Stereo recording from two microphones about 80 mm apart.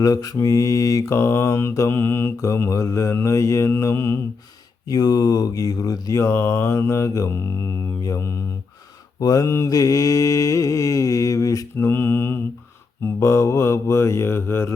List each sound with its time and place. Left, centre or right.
0.0 s mantra: left
1.9 s speech: left
4.9 s speech: left
9.2 s mantra: left
11.8 s mantra: left
13.1 s speech: left